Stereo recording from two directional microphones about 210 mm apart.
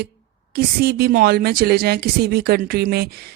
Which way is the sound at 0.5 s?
50° right (ahead or behind).